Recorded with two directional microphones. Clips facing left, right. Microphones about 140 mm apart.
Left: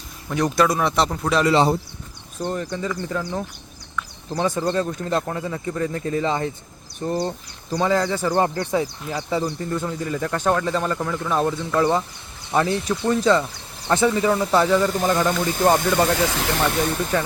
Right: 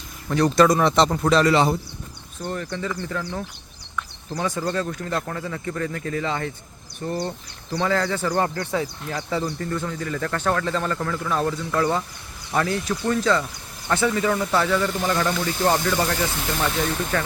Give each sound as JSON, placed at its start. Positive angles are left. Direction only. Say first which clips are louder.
{"t": 0.3, "sound": "speech", "louder": "right 2 dB", "side_deg": 10}
{"t": 1.5, "sound": "speech", "louder": "left 1 dB", "side_deg": 30}
{"t": 2.4, "sound": "speech", "louder": "left 3 dB", "side_deg": 20}
{"t": 16.2, "sound": "speech", "louder": "left 4 dB", "side_deg": 90}
{"t": 17.1, "sound": "speech", "louder": "left 3 dB", "side_deg": 20}